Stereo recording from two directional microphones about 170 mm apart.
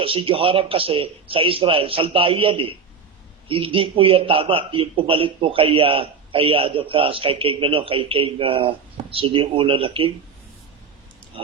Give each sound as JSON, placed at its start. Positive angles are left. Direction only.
{"t": 0.0, "sound": "a man's voice", "side_deg": -30}
{"t": 11.3, "sound": "pig", "side_deg": -35}